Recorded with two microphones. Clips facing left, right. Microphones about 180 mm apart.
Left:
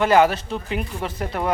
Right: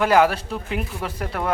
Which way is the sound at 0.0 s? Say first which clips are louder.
Left 1 dB; 5° right (ahead or behind).